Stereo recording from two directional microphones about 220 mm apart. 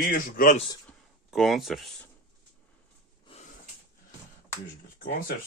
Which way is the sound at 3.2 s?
30° left (ahead or behind).